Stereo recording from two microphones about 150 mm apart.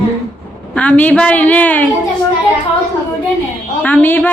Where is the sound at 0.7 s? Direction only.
10° left (ahead or behind).